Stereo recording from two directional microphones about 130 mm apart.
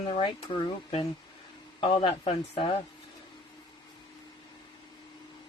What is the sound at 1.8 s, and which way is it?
Speech, 45° left (ahead or behind).